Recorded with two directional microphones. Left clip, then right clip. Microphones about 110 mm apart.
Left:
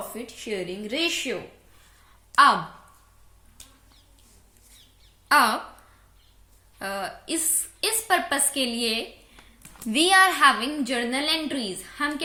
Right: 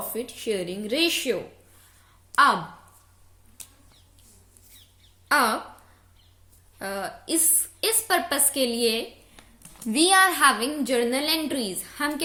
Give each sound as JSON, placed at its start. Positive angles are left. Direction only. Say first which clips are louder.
{"t": 0.1, "sound": "speech", "louder": "right 4 dB", "side_deg": -55}
{"t": 2.3, "sound": "speech", "louder": "left 2 dB", "side_deg": -15}
{"t": 5.3, "sound": "a woman's voice", "louder": "left 2 dB", "side_deg": -20}
{"t": 6.7, "sound": "a woman's voice", "louder": "left 1 dB", "side_deg": -25}
{"t": 9.9, "sound": "a child's voice", "louder": "left 1 dB", "side_deg": -15}
{"t": 10.4, "sound": "a woman's voice", "louder": "left 1 dB", "side_deg": -30}